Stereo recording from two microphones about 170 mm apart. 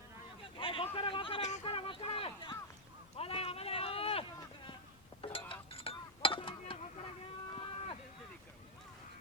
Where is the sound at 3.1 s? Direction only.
35° left (ahead or behind).